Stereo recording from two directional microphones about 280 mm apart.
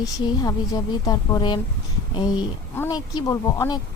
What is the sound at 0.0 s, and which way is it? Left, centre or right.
Speech, centre.